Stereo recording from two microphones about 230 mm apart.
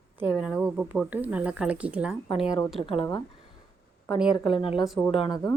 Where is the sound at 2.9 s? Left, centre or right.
Left.